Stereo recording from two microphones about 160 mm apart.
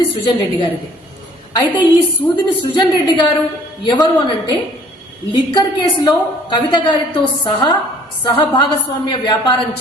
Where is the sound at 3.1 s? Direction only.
30° left (ahead or behind).